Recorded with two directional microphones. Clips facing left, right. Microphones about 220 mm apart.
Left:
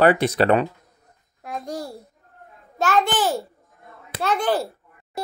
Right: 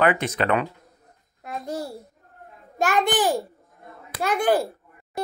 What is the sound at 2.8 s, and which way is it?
Speech, 15° right (ahead or behind).